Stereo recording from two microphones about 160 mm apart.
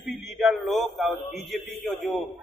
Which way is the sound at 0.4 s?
Centre (ahead or behind).